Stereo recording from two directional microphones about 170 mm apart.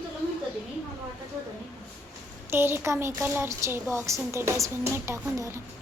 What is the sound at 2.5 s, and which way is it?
A woman's voice, 15° right (ahead or behind).